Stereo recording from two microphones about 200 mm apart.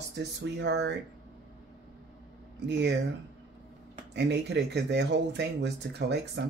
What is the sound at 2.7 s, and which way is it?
Speech, 55° right (ahead or behind).